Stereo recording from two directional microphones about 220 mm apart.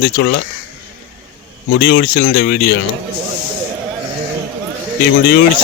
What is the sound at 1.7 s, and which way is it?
Speech, 45° left (ahead or behind).